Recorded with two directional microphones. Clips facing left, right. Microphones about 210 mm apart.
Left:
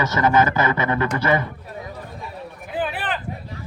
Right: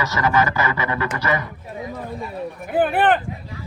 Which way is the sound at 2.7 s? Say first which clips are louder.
Right 9 dB; 55° right (ahead or behind).